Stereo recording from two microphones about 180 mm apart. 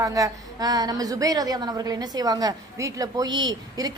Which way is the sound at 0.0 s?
20° right (ahead or behind).